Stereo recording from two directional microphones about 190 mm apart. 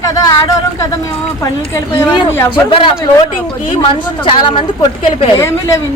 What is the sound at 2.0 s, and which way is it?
Speech, 15° left (ahead or behind).